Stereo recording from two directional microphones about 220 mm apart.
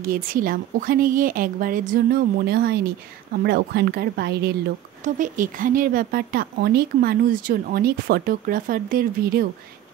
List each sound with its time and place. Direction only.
0.0 s speech: 40° right (ahead or behind)
5.0 s speech: 35° right (ahead or behind)